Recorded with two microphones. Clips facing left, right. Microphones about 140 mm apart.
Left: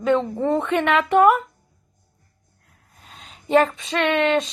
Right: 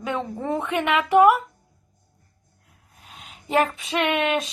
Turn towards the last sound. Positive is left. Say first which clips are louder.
# left 3 dB
turn(degrees=-10)  # may be behind; listen again after turning